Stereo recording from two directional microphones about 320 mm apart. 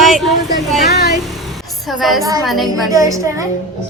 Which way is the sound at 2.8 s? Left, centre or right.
Centre.